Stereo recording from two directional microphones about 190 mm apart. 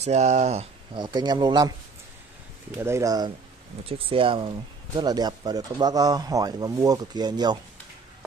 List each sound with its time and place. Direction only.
0.0 s speech: 35° right (ahead or behind)
0.9 s speech: 20° right (ahead or behind)
2.7 s speech: 15° right (ahead or behind)
4.0 s speech: 30° right (ahead or behind)